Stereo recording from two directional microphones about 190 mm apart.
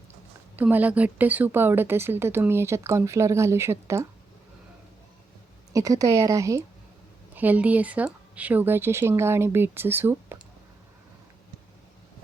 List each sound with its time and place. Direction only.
0.5 s speech: 10° right (ahead or behind)
5.7 s speech: 15° right (ahead or behind)